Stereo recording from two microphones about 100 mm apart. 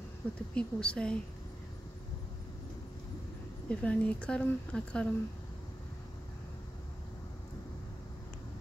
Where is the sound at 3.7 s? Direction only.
10° left (ahead or behind).